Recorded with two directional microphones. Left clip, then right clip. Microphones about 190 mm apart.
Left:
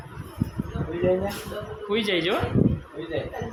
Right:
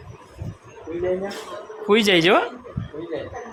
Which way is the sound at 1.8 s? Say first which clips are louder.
Right 8 dB; 40° right (ahead or behind).